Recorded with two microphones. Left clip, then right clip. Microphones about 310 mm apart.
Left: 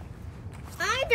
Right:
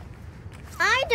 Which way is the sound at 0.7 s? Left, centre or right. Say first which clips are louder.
Right 6 dB; right.